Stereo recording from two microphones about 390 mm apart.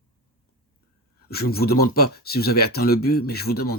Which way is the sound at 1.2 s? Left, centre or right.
Left.